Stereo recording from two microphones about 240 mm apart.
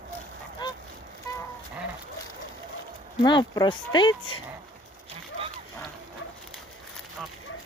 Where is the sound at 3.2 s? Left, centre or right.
Centre.